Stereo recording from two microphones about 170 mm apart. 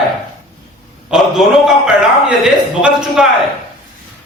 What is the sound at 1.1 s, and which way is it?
A man's voice, centre (ahead or behind).